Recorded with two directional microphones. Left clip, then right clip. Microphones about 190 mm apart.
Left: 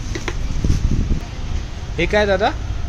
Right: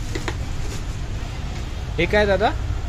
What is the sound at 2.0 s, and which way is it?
Speech, 10° left (ahead or behind).